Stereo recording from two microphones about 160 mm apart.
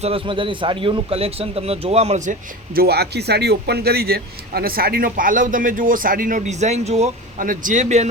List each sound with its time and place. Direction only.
0.0 s a man's voice: 35° right (ahead or behind)
2.7 s speech: 85° right; by 8.0 s 45° right (ahead or behind)